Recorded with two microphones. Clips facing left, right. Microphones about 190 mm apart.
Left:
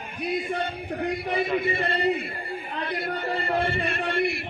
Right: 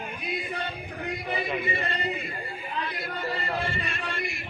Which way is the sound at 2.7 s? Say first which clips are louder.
Left 4 dB; 60° left (ahead or behind).